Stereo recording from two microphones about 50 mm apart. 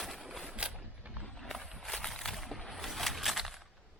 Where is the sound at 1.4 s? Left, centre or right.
Centre.